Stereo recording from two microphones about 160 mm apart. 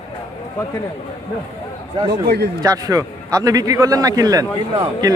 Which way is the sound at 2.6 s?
20° right (ahead or behind).